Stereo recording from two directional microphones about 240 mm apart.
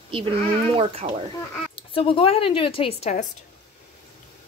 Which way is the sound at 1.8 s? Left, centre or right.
Left.